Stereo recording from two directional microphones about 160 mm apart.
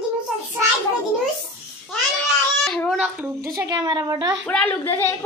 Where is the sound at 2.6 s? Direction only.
5° left (ahead or behind).